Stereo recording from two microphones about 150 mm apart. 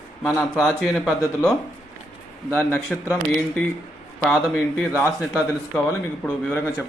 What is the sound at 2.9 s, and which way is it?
Speech, centre (ahead or behind).